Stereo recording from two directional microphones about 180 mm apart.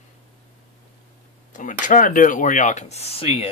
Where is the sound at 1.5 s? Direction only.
45° left (ahead or behind).